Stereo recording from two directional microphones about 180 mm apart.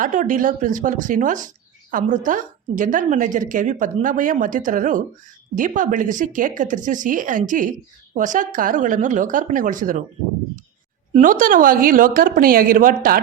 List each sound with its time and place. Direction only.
0.0 s speech: 45° right (ahead or behind)
11.1 s speech: 45° right (ahead or behind)